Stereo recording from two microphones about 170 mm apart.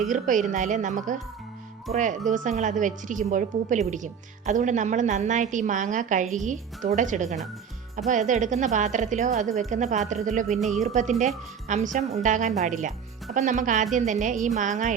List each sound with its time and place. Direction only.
0.1 s speech: 50° right (ahead or behind)